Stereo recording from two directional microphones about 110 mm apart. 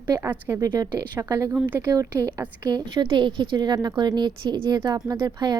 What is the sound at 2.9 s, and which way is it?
Speech, 45° right (ahead or behind).